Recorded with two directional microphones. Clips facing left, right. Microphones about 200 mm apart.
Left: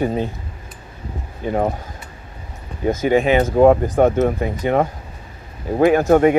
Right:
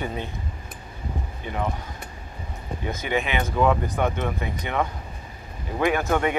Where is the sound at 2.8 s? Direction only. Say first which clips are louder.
Left 11 dB; 45° left (ahead or behind).